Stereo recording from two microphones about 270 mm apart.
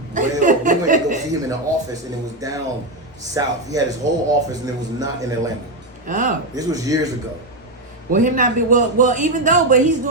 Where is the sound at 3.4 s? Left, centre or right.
Centre.